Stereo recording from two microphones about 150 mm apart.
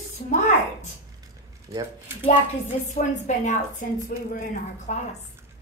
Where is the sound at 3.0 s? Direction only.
55° left (ahead or behind).